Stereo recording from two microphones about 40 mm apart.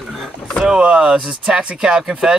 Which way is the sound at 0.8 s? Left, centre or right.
Right.